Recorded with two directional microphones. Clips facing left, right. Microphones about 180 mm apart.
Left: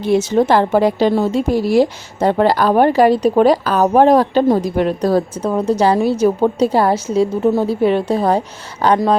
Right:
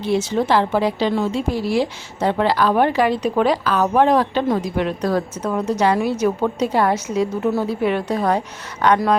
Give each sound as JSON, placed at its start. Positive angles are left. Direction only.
{"t": 0.0, "sound": "a woman's voice", "side_deg": 45}